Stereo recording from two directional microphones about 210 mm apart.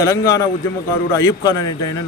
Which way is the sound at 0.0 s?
15° left (ahead or behind).